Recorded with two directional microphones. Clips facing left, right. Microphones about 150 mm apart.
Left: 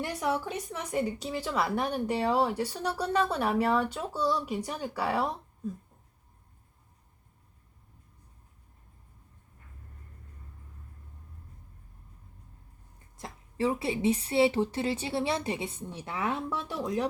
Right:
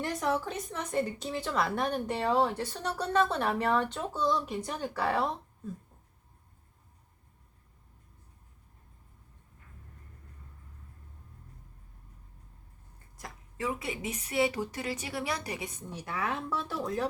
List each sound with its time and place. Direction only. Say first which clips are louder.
0.0 s a woman's voice: even; 10° left (ahead or behind)
13.1 s a woman's voice: left 6 dB; 30° left (ahead or behind)